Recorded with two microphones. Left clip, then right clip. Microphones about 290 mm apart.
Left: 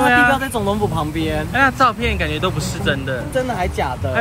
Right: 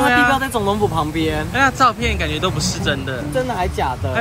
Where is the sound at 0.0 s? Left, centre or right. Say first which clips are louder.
Left 1 dB; centre.